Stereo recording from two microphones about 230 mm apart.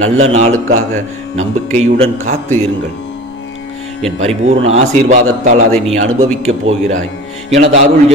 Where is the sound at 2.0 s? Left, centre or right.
Right.